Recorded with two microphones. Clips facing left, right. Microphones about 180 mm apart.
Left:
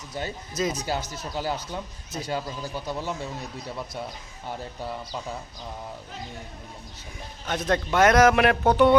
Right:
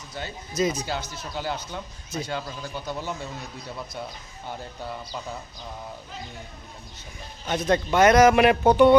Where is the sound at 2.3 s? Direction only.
5° left (ahead or behind).